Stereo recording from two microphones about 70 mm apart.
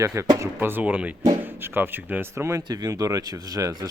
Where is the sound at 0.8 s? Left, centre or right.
Right.